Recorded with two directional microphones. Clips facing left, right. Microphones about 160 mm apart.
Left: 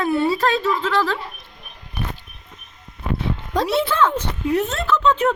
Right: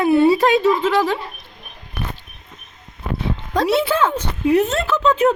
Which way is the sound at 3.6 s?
5° right (ahead or behind).